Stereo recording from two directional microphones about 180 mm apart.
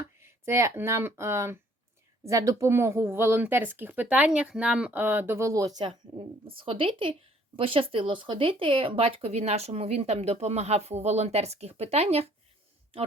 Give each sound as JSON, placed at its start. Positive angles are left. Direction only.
{"t": 0.2, "sound": "speech", "side_deg": -15}